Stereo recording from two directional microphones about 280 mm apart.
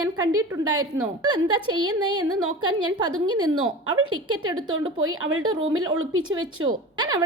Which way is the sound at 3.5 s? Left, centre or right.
Right.